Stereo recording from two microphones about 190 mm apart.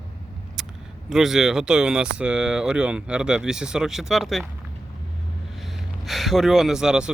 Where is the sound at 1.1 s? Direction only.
Centre (ahead or behind).